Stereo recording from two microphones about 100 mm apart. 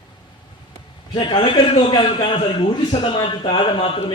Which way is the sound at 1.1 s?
55° left (ahead or behind).